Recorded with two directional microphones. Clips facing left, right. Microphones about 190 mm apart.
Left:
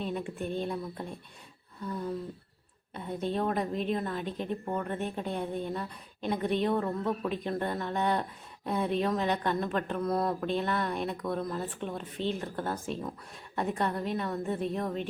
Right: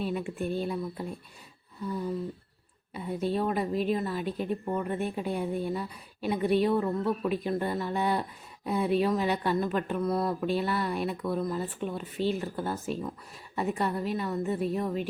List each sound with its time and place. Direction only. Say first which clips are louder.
0.0 s a woman's voice: right 3 dB; 5° right (ahead or behind)